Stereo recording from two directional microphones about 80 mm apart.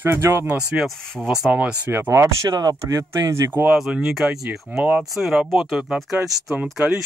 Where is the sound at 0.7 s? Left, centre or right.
Centre.